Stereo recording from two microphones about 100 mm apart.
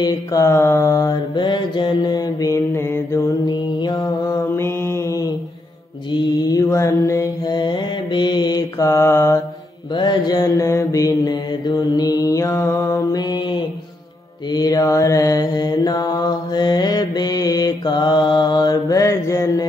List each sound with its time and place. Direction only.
0.0 s mantra: 40° left (ahead or behind)
2.5 s mantra: 25° left (ahead or behind)
3.4 s mantra: 45° left (ahead or behind)
4.4 s mantra: 25° left (ahead or behind)
6.4 s mantra: 35° left (ahead or behind)
7.5 s mantra: 50° left (ahead or behind); by 9.4 s 30° left (ahead or behind)
9.9 s mantra: 45° left (ahead or behind); by 12.9 s 25° left (ahead or behind)
12.9 s mantra: 40° left (ahead or behind)